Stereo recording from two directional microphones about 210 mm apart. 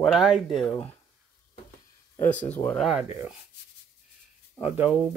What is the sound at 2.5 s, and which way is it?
Speech, 5° left (ahead or behind).